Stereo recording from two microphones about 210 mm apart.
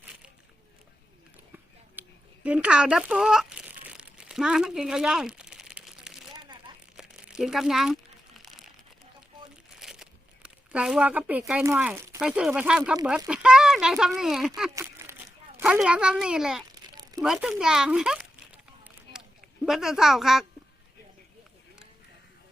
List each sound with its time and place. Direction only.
1.5 s a sound: 10° right (ahead or behind)
6.4 s crumpling: 20° right (ahead or behind)
6.9 s crumpling: 5° right (ahead or behind)
13.1 s a child's voice: 5° right (ahead or behind)
14.8 s crumpling: 15° right (ahead or behind)
15.5 s a child's voice: 5° right (ahead or behind)
17.0 s a sound: 15° right (ahead or behind)
17.2 s a child's voice: centre (ahead or behind)
19.1 s a sound: 50° left (ahead or behind)
19.6 s a child's voice: centre (ahead or behind)